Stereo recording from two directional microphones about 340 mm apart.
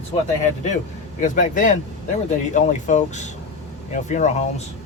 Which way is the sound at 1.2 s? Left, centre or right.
Left.